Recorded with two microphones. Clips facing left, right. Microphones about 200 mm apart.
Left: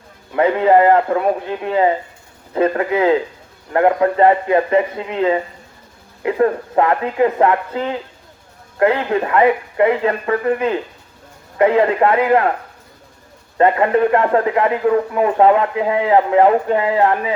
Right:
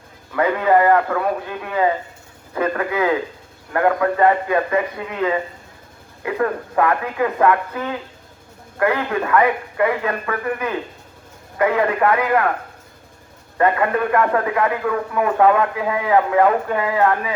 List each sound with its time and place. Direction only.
0.3 s speech: 25° left (ahead or behind)
13.6 s speech: 25° left (ahead or behind)